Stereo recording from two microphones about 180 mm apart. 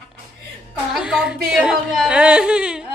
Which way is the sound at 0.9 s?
5° right (ahead or behind).